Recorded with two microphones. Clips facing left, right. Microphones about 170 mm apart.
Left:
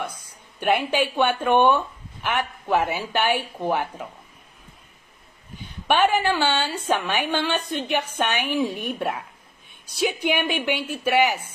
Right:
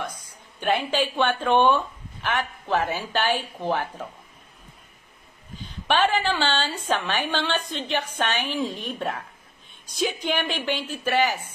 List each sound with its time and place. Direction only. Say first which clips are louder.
0.6 s a woman's voice: left 2 dB; 10° left (ahead or behind)
5.9 s a woman's voice: left 2 dB; 10° left (ahead or behind)